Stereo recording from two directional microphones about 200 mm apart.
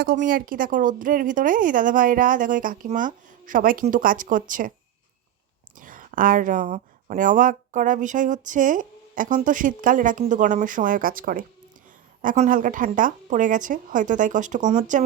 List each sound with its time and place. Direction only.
0.0 s speech: 45° right (ahead or behind)
5.7 s speech: 40° right (ahead or behind)